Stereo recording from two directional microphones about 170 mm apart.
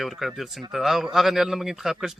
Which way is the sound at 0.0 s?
Centre (ahead or behind).